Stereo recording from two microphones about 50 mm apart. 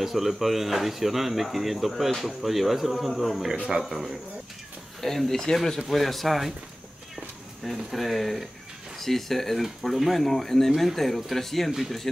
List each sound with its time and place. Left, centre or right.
0.0 s speech: centre
3.5 s a man's voice: centre
5.0 s speech: centre
7.6 s speech: centre